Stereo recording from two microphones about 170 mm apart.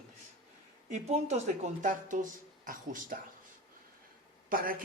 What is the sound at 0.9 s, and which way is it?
A man's voice, 40° right (ahead or behind).